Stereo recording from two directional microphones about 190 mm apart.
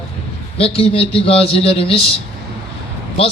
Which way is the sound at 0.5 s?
30° left (ahead or behind).